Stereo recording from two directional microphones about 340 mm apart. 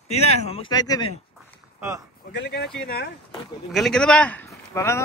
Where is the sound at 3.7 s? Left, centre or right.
Centre.